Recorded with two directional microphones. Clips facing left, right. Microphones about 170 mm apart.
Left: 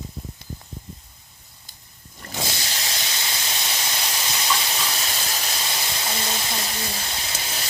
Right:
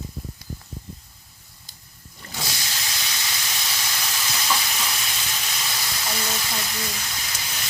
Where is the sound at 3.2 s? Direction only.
30° left (ahead or behind).